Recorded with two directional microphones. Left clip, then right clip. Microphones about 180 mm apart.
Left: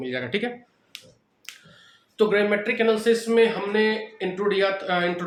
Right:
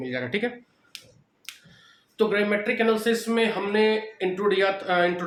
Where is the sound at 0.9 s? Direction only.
10° left (ahead or behind).